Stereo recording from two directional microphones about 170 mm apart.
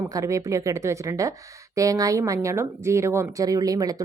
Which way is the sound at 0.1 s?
20° right (ahead or behind).